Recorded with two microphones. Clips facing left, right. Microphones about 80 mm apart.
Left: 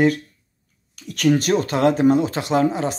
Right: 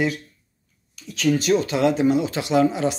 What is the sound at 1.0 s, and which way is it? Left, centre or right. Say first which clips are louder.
Speech: left 3 dB; left.